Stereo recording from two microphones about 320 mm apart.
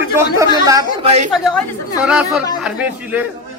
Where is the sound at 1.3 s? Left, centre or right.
Centre.